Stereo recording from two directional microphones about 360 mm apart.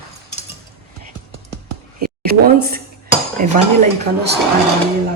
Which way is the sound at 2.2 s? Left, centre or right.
Right.